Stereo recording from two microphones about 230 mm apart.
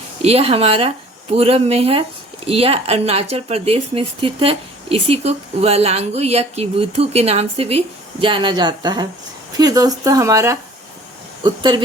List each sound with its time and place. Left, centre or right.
0.2 s speech: right